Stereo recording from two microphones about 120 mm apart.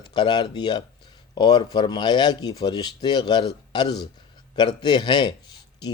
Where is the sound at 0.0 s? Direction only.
40° left (ahead or behind).